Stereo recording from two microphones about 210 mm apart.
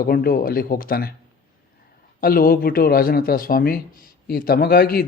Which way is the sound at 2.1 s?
45° left (ahead or behind).